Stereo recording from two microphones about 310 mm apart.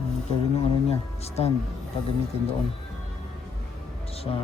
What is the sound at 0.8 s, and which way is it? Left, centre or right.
Speech, centre.